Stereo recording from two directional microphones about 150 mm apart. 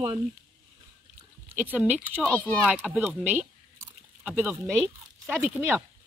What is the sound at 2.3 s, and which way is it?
Speech, 15° left (ahead or behind).